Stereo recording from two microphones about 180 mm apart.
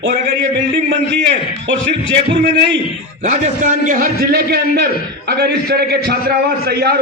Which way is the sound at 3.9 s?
55° right (ahead or behind).